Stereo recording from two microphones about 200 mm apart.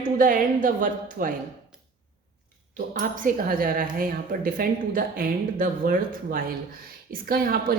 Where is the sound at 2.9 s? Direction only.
45° right (ahead or behind).